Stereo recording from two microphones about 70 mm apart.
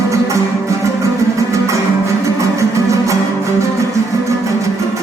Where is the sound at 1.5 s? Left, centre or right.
Right.